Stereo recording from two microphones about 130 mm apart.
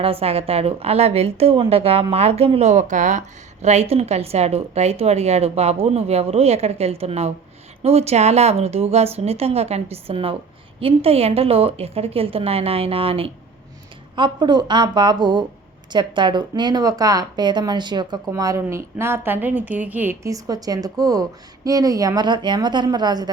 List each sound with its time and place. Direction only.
0.0 s a woman's voice: 50° right (ahead or behind)
14.2 s speech: 35° right (ahead or behind)
18.3 s a woman's voice: 25° right (ahead or behind)
20.2 s a woman's voice: 25° right (ahead or behind)